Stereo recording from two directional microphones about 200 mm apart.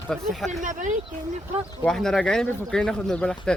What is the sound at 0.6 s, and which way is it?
Speech, 40° right (ahead or behind).